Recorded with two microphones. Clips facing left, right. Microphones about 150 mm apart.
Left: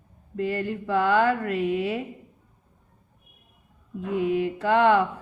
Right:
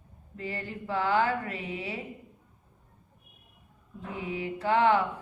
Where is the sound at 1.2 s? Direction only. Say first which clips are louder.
Left 6 dB; 55° left (ahead or behind).